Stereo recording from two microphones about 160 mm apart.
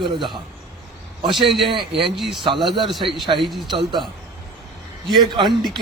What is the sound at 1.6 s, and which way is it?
A man's voice, 35° right (ahead or behind).